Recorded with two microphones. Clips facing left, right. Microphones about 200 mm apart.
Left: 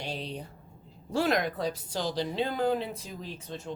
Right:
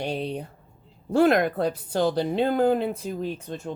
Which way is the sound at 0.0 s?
55° right (ahead or behind).